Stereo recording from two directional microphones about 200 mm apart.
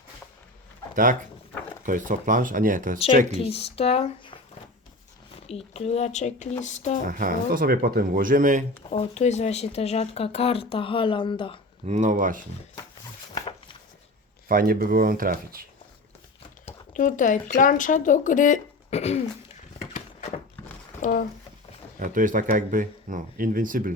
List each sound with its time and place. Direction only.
1.8 s speech: 40° right (ahead or behind)
3.3 s speech: 30° left (ahead or behind)
5.5 s speech: 30° left (ahead or behind)
7.0 s speech: 45° right (ahead or behind)
8.9 s speech: 35° left (ahead or behind)
11.9 s speech: 35° right (ahead or behind)
14.4 s speech: 45° right (ahead or behind)
16.6 s speech: 40° left (ahead or behind)
21.0 s speech: 45° left (ahead or behind)
21.9 s speech: 40° right (ahead or behind)